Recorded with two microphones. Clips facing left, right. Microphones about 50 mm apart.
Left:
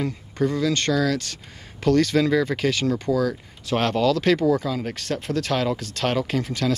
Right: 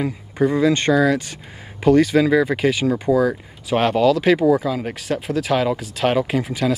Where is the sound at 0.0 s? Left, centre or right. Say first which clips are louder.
Right 4 dB; centre.